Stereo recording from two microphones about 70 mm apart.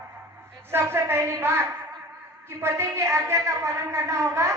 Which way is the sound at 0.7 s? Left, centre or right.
Right.